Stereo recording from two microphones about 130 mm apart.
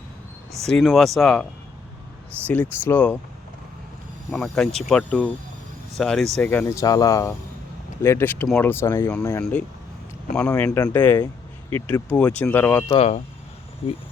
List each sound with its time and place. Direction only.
0.6 s speech: centre (ahead or behind)
2.5 s speech: 15° left (ahead or behind)
4.3 s speech: 5° left (ahead or behind)
6.4 s speech: 10° left (ahead or behind)
6.7 s speech: 25° left (ahead or behind)
10.5 s speech: 25° left (ahead or behind)
10.8 s speech: 15° left (ahead or behind)
12.9 s speech: 50° left (ahead or behind)